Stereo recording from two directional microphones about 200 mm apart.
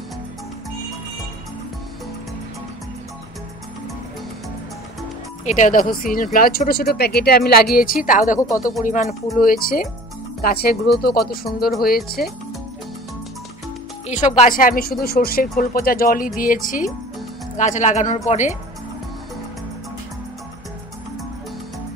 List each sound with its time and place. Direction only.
5.4 s speech: 40° left (ahead or behind)
8.4 s speech: 15° left (ahead or behind)
8.8 s speech: 40° left (ahead or behind)
14.0 s speech: 35° left (ahead or behind)